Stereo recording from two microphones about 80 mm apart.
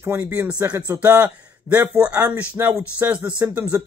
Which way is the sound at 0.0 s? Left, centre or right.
Right.